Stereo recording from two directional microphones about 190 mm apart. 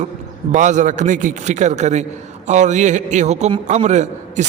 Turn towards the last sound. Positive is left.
turn(degrees=-40)  # may be behind; listen again after turning